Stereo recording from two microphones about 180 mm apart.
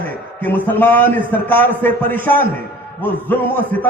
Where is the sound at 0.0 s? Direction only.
10° left (ahead or behind).